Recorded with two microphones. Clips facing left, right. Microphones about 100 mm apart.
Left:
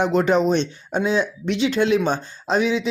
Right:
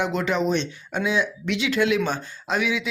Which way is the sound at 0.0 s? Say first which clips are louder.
Left 5 dB; 40° left (ahead or behind).